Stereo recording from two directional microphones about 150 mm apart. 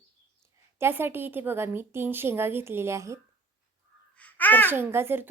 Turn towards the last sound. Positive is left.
turn(degrees=-15)  # may be behind; listen again after turning